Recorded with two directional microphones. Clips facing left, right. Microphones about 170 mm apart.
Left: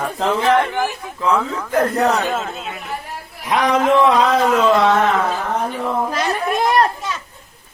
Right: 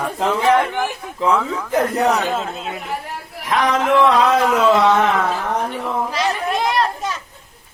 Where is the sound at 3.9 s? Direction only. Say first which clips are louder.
Even; 10° left (ahead or behind).